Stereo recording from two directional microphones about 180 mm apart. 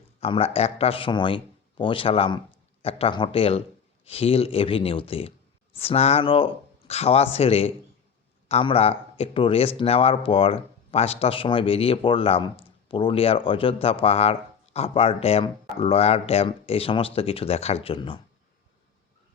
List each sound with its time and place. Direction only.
0.2 s speech: 30° left (ahead or behind)